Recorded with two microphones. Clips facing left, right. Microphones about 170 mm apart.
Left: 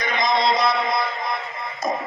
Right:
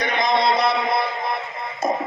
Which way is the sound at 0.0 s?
65° right (ahead or behind).